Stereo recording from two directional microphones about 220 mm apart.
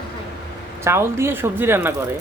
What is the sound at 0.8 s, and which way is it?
Speech, 10° right (ahead or behind).